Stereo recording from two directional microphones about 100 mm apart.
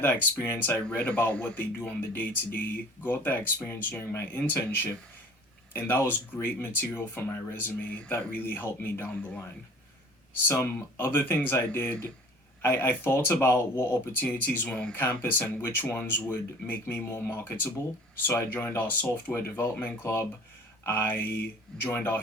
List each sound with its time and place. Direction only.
0.0 s speech: 20° left (ahead or behind)
10.6 s speech: 20° left (ahead or behind)
15.2 s speech: 20° left (ahead or behind)